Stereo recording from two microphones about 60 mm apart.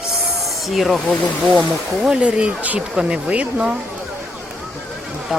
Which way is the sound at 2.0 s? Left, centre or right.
Centre.